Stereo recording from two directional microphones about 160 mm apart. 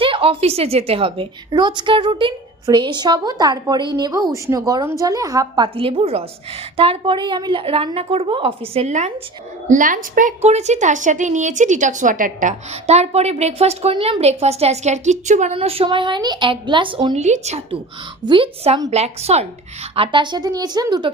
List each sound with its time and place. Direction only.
0.0 s a woman's voice: 35° right (ahead or behind)
9.6 s a woman's voice: 55° right (ahead or behind)
15.5 s a woman's voice: 35° right (ahead or behind)
17.2 s a woman's voice: 45° right (ahead or behind)
20.0 s a woman's voice: 30° right (ahead or behind)